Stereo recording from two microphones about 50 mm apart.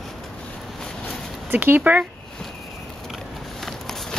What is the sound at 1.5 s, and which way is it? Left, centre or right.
Speech, right.